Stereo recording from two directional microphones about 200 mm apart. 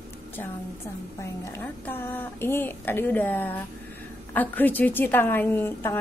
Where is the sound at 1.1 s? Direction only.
15° left (ahead or behind).